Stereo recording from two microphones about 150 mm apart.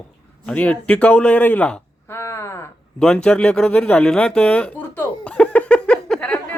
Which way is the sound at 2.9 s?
5° left (ahead or behind).